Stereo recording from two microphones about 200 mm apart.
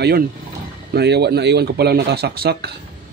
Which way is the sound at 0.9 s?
55° right (ahead or behind).